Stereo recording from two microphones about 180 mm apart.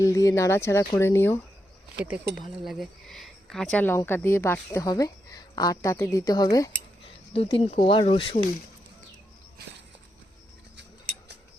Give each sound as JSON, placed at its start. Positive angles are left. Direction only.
{"t": 0.0, "sound": "speech", "side_deg": 15}
{"t": 2.4, "sound": "speech", "side_deg": 0}
{"t": 7.3, "sound": "speech", "side_deg": 35}